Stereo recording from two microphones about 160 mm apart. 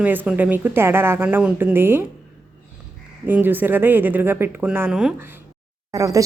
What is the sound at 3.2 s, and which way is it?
A woman's voice, 10° right (ahead or behind).